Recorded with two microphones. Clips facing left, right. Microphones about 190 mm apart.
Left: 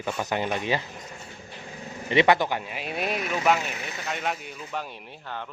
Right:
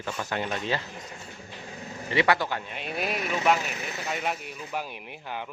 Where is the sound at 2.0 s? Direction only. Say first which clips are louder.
Left 4 dB; 20° left (ahead or behind).